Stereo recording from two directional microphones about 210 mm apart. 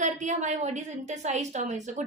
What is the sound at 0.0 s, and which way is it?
A woman's voice, 35° right (ahead or behind).